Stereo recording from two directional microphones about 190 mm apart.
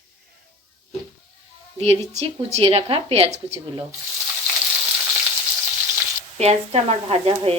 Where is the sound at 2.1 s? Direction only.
35° right (ahead or behind).